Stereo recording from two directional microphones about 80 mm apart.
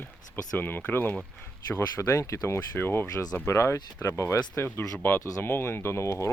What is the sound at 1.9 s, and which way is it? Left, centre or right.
Speech, left.